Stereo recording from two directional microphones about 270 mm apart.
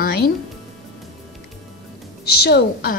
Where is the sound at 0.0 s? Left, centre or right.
Left.